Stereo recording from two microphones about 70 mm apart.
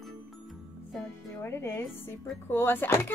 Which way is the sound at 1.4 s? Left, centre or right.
Left.